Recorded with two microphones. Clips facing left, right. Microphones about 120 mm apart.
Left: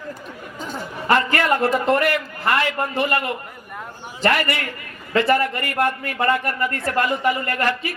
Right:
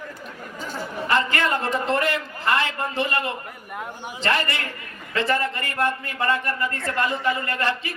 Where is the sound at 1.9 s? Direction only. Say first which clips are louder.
Left 4 dB; 25° right (ahead or behind).